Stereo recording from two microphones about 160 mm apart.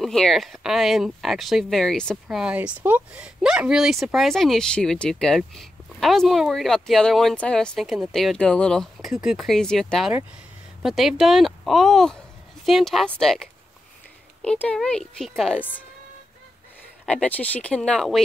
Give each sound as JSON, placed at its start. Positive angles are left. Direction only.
{"t": 0.0, "sound": "speech", "side_deg": 0}
{"t": 17.0, "sound": "speech", "side_deg": 5}